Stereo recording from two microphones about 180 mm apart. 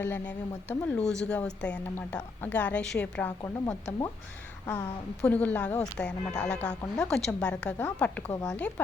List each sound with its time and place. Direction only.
0.0 s a woman's voice: 10° left (ahead or behind)